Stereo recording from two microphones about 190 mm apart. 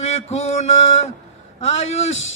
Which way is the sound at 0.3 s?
35° left (ahead or behind).